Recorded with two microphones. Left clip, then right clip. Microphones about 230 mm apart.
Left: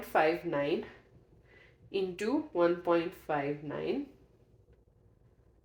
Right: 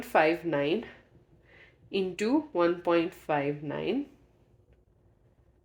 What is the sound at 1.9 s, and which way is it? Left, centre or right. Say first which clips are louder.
Speech: right 4 dB; right.